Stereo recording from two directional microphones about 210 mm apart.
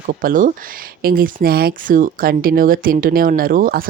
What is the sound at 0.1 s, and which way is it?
Speech, 40° right (ahead or behind).